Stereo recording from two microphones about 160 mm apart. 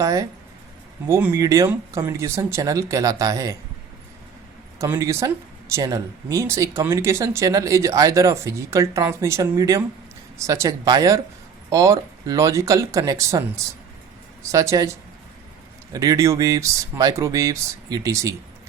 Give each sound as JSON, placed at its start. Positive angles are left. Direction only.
{"t": 0.0, "sound": "speech", "side_deg": -20}
{"t": 4.8, "sound": "speech", "side_deg": -20}
{"t": 14.5, "sound": "speech", "side_deg": -20}
{"t": 15.9, "sound": "speech", "side_deg": -20}